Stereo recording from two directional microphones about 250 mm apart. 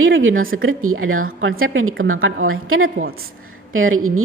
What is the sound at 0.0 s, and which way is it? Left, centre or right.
A woman's voice, right.